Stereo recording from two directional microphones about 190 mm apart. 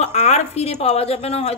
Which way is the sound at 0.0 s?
35° left (ahead or behind).